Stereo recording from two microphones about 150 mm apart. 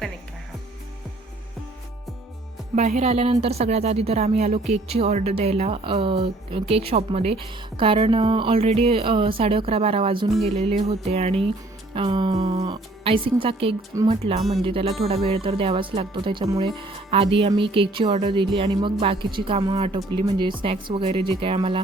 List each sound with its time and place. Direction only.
2.7 s music: 50° right (ahead or behind)
3.4 s speech: 45° right (ahead or behind)
10.4 s music: 45° right (ahead or behind)
11.9 s speech: 35° right (ahead or behind)
14.1 s music: 45° right (ahead or behind)
14.5 s speech: 40° right (ahead or behind)